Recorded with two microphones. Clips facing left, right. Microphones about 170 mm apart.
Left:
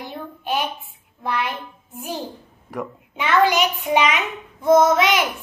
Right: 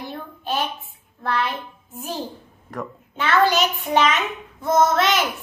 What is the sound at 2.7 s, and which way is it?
A child's voice, 15° left (ahead or behind).